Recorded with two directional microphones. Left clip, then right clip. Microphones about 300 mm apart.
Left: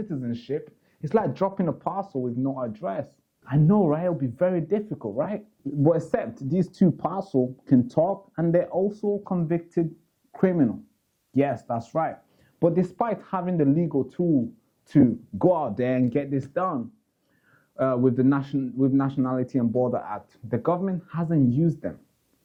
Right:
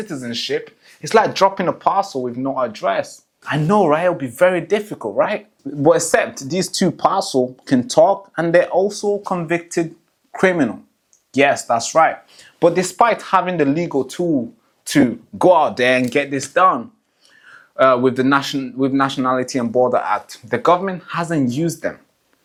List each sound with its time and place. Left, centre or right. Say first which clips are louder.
0.0 s speech: right 9 dB; centre
14.2 s speech: right 4 dB; centre
14.8 s speech: right 5 dB; centre